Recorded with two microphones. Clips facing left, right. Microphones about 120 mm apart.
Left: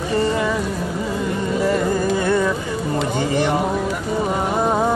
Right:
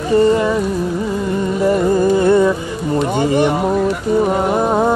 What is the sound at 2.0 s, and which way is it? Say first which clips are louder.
Music: right 7 dB; 25° right (ahead or behind).